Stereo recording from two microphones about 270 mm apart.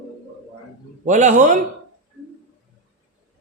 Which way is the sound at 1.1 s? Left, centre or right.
Right.